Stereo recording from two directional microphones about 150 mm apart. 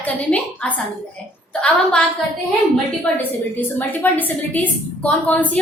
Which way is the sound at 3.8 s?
10° left (ahead or behind).